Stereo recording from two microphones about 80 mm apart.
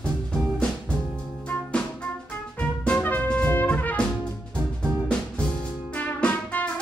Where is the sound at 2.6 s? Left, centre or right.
Centre.